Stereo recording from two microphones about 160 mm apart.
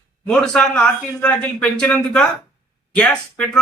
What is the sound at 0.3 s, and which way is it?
Speech, 5° left (ahead or behind).